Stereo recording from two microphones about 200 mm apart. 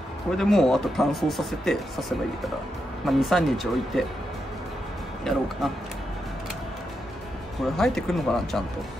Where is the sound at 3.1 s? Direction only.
Centre (ahead or behind).